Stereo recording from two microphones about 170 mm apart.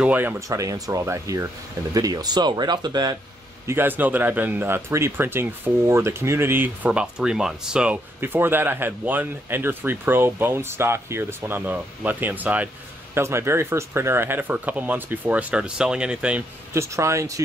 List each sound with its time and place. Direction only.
0.0 s speech: 10° right (ahead or behind)
3.6 s speech: 10° right (ahead or behind)